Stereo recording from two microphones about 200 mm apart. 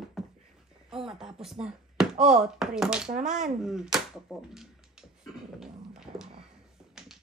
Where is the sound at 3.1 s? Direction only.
40° right (ahead or behind).